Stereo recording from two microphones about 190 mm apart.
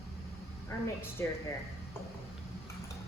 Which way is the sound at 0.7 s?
15° left (ahead or behind).